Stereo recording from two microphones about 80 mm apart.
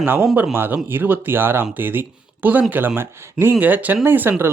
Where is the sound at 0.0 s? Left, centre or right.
Right.